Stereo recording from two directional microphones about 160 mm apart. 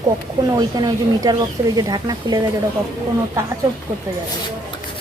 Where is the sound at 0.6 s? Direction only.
25° right (ahead or behind).